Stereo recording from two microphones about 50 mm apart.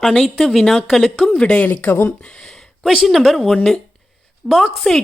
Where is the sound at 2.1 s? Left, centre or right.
Centre.